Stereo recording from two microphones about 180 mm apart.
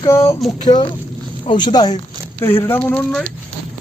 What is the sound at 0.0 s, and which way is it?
Speech, 15° left (ahead or behind).